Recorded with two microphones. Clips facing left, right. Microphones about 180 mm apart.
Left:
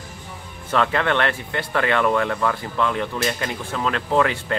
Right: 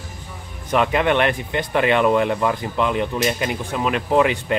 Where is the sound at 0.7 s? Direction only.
15° right (ahead or behind).